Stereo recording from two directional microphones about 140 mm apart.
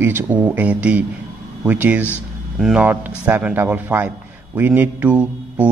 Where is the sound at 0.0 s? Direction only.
15° right (ahead or behind).